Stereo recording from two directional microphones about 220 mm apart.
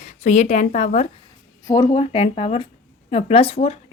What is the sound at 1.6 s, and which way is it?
A woman's voice, 20° left (ahead or behind).